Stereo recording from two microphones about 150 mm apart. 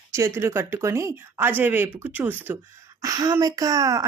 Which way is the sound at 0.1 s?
20° right (ahead or behind).